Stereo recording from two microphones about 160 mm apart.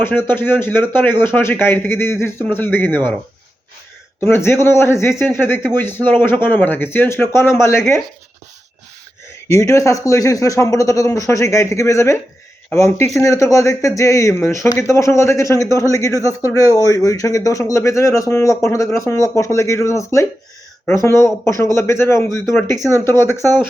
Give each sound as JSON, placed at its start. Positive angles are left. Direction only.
{"t": 0.0, "sound": "speech", "side_deg": 15}
{"t": 4.2, "sound": "speech", "side_deg": 15}
{"t": 9.5, "sound": "speech", "side_deg": 15}
{"t": 22.8, "sound": "speech", "side_deg": -20}
{"t": 23.0, "sound": "speech", "side_deg": 15}